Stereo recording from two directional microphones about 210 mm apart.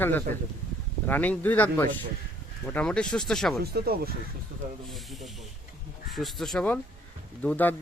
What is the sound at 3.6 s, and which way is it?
Speech, 45° right (ahead or behind).